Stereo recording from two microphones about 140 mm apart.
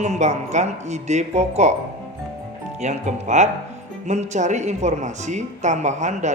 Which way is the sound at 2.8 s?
55° right (ahead or behind).